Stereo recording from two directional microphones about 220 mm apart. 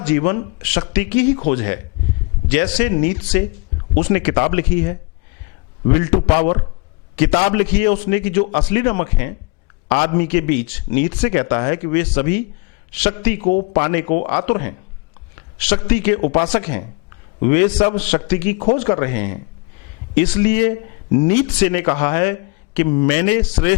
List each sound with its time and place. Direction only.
0.0 s a man's voice: 15° left (ahead or behind)
7.6 s speech: 10° left (ahead or behind)